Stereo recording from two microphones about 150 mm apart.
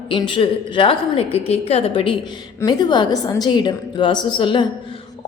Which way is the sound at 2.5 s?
25° left (ahead or behind).